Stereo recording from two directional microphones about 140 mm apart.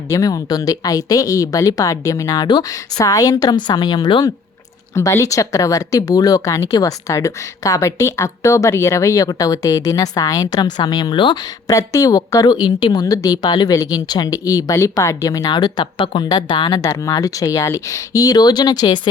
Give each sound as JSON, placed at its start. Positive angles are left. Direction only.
{"t": 0.1, "sound": "speech", "side_deg": 25}